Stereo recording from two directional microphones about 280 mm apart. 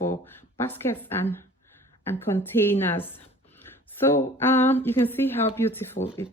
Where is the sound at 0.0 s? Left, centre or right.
Left.